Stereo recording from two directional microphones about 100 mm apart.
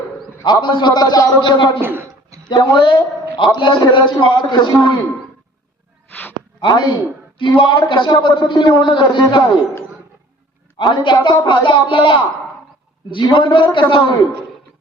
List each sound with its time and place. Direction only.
0.4 s a man's voice: 50° left (ahead or behind)
1.5 s a man's voice: 55° left (ahead or behind)
1.8 s a sound: 20° right (ahead or behind)
2.8 s a man's voice: 55° left (ahead or behind)
6.6 s a man's voice: 50° left (ahead or behind)
10.8 s a man's voice: 55° left (ahead or behind)